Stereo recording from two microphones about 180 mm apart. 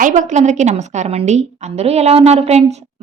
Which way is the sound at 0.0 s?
40° right (ahead or behind).